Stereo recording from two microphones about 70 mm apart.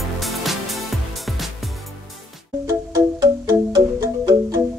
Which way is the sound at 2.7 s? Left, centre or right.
Right.